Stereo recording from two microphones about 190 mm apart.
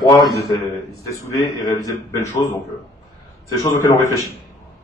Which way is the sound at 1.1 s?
15° left (ahead or behind).